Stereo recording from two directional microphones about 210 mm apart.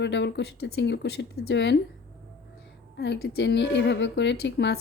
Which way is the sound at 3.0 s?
55° left (ahead or behind).